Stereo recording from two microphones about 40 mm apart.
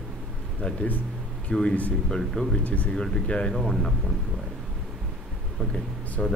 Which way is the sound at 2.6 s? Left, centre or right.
Left.